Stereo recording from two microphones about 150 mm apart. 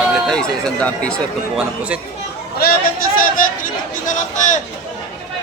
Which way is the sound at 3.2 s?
65° left (ahead or behind).